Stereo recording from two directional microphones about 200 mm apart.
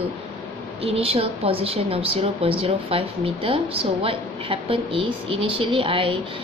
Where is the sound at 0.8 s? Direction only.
30° right (ahead or behind).